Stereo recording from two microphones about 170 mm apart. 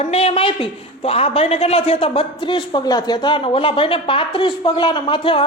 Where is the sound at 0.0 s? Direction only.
35° left (ahead or behind).